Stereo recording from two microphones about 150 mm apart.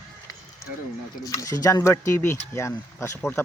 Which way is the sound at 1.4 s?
20° left (ahead or behind).